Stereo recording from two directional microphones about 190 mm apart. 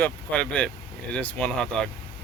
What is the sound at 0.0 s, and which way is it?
Speech, 5° left (ahead or behind).